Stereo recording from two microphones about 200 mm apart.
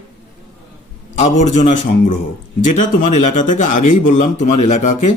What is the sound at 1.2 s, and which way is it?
Speech, 35° left (ahead or behind).